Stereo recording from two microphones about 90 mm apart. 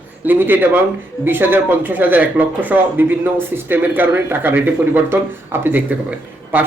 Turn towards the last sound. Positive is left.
turn(degrees=-20)  # may be behind; listen again after turning